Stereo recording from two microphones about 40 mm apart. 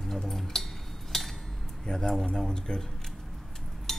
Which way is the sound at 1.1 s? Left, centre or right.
Centre.